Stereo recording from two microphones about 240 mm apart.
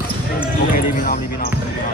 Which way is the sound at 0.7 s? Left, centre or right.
Left.